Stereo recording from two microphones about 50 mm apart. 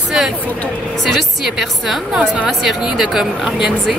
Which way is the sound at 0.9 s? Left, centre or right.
Centre.